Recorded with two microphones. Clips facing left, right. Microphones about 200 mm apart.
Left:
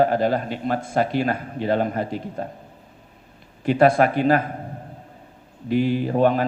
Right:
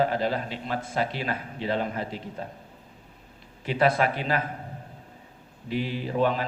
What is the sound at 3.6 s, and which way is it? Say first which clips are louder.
Speech: left 7 dB; 50° left (ahead or behind).